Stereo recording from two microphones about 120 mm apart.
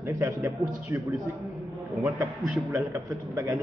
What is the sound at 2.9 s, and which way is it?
Speech, 25° right (ahead or behind).